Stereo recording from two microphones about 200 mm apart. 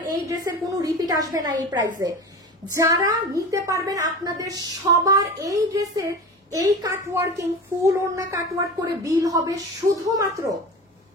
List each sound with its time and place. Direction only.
0.3 s a woman's voice: 20° right (ahead or behind)